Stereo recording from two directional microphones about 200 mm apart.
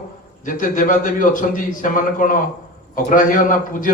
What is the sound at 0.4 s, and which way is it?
A man's voice, 40° left (ahead or behind).